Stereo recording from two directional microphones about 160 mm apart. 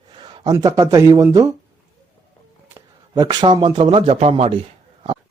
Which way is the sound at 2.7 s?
25° right (ahead or behind).